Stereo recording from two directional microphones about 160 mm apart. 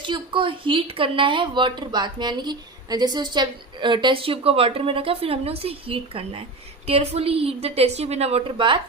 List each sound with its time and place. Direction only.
0.0 s speech: 30° right (ahead or behind)